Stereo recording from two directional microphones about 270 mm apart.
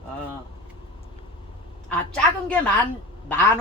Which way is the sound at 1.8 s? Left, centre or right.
Centre.